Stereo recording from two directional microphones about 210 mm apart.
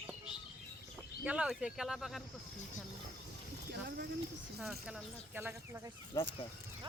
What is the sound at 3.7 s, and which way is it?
Speech, 50° right (ahead or behind).